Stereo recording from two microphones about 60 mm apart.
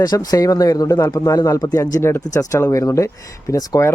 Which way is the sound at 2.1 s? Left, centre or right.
Left.